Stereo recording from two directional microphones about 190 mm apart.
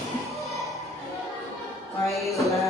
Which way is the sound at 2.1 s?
Centre (ahead or behind).